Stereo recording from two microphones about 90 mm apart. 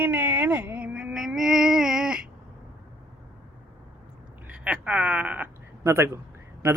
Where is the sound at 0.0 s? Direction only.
20° right (ahead or behind).